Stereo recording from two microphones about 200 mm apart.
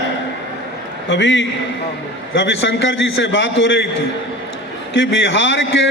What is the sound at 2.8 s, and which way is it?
A man's voice, 65° left (ahead or behind).